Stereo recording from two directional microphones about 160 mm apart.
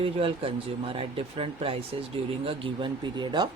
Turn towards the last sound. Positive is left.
turn(degrees=-30)  # may be behind; listen again after turning